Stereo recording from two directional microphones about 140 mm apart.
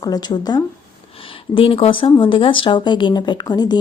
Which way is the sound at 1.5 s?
40° left (ahead or behind).